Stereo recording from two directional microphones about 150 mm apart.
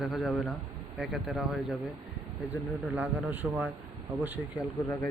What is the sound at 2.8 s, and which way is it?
Speech, 10° right (ahead or behind).